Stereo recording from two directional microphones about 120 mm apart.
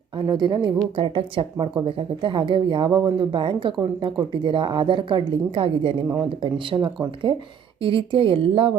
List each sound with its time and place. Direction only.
0.3 s speech: 35° right (ahead or behind)
0.9 s speech: 50° right (ahead or behind)